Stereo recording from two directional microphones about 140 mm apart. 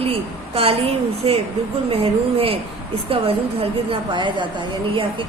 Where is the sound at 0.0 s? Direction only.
45° right (ahead or behind).